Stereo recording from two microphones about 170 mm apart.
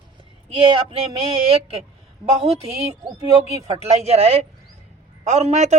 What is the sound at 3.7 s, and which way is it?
Speech, 40° right (ahead or behind).